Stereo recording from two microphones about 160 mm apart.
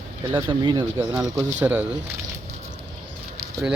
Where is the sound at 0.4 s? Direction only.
30° right (ahead or behind).